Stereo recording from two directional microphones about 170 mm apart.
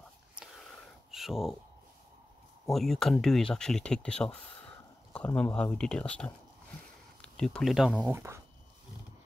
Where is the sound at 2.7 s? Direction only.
Centre (ahead or behind).